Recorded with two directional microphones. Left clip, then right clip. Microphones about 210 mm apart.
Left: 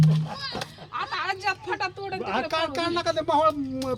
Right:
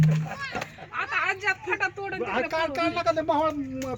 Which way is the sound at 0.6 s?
50° left (ahead or behind).